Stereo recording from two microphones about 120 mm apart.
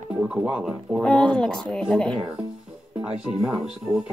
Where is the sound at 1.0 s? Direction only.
10° left (ahead or behind).